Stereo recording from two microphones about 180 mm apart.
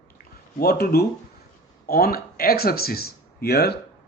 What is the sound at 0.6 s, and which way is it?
Speech, 60° left (ahead or behind).